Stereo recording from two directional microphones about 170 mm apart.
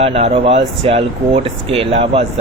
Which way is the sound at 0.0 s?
35° right (ahead or behind).